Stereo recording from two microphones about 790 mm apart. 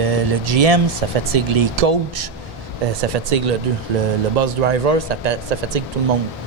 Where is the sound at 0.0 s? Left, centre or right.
Right.